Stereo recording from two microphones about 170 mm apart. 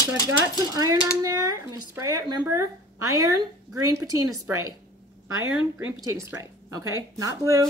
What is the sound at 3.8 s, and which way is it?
Speech, 20° right (ahead or behind).